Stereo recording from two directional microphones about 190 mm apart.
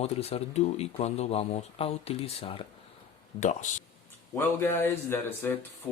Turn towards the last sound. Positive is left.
turn(degrees=10)  # may be behind; listen again after turning